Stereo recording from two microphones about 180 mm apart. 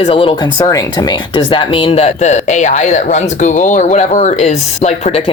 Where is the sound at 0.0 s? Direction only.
30° left (ahead or behind).